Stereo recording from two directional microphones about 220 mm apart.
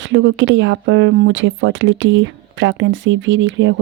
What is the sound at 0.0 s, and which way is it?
Speech, 60° right (ahead or behind).